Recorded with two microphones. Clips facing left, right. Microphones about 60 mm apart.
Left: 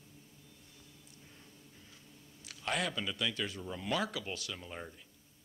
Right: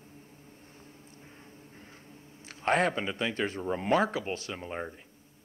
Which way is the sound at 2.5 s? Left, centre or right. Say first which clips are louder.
Right 9 dB; right.